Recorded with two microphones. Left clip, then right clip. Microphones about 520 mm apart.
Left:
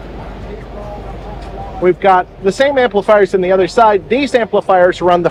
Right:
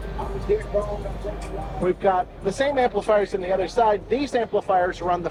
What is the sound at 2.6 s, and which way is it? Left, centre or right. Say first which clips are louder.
Speech: left 9 dB; left.